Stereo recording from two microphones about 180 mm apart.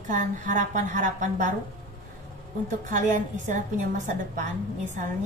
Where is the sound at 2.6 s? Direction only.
45° right (ahead or behind).